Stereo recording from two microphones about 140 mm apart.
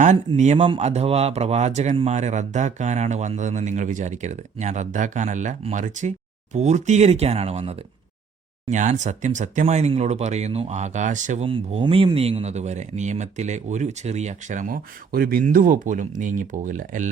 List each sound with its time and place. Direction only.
0.3 s speech: 50° right (ahead or behind)
8.7 s speech: 60° right (ahead or behind)
11.4 s speech: 40° right (ahead or behind); by 17.1 s 65° right (ahead or behind)